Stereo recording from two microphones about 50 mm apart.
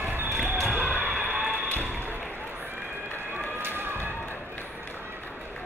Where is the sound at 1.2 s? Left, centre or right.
Right.